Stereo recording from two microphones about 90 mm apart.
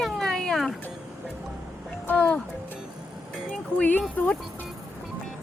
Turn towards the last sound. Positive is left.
turn(degrees=20)  # may be behind; listen again after turning